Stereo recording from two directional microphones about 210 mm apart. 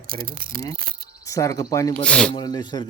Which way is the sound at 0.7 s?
45° right (ahead or behind).